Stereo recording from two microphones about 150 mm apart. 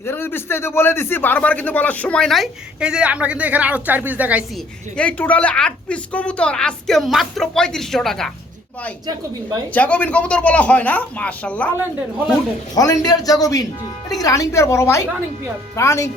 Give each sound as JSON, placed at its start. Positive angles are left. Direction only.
{"t": 0.0, "sound": "speech", "side_deg": 15}
{"t": 4.9, "sound": "a woman's voice", "side_deg": 10}
{"t": 9.0, "sound": "speech", "side_deg": -25}
{"t": 9.7, "sound": "speech", "side_deg": 10}
{"t": 12.7, "sound": "a man's voice", "side_deg": 25}